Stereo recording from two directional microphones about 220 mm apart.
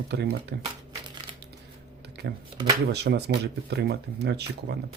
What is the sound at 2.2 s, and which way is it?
Speech, 50° right (ahead or behind).